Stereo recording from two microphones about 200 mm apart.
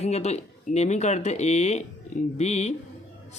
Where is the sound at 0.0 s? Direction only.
35° left (ahead or behind).